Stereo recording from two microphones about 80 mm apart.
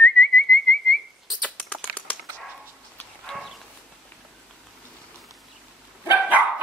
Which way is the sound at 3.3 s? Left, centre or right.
Centre.